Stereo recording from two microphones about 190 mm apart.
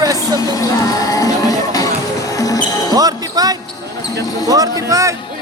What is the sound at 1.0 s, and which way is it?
Music, 20° left (ahead or behind).